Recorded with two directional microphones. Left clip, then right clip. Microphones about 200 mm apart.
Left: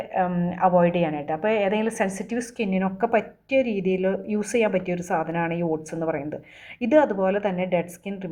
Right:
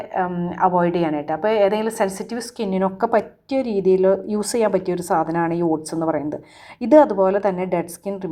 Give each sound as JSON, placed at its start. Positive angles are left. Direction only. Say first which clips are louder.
{"t": 0.1, "sound": "a woman's voice", "louder": "right 2 dB", "side_deg": -10}